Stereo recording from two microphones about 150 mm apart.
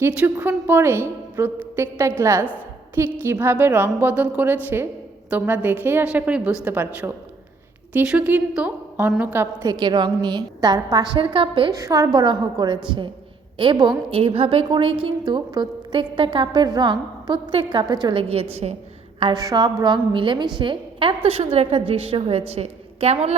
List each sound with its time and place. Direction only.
0.0 s a woman's voice: 5° right (ahead or behind)
9.6 s a woman's voice: 30° right (ahead or behind)
11.7 s a woman's voice: 20° right (ahead or behind); by 18.8 s 45° right (ahead or behind)
19.2 s a woman's voice: 25° right (ahead or behind); by 23.3 s 45° right (ahead or behind)